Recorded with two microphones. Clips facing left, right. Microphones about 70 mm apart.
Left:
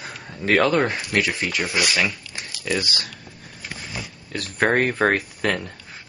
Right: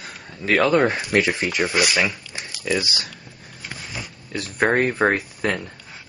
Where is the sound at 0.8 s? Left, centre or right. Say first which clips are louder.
Right 3 dB; right.